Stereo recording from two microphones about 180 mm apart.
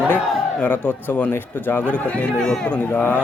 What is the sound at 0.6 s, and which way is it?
Speech, 10° left (ahead or behind).